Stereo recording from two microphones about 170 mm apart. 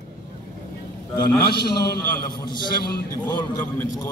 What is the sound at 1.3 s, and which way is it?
Speech, 65° left (ahead or behind).